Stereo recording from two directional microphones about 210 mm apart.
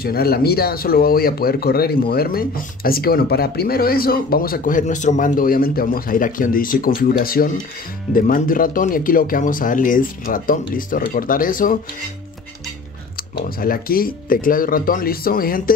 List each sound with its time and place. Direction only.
0.0 s speech: 45° left (ahead or behind)
13.3 s speech: 45° left (ahead or behind)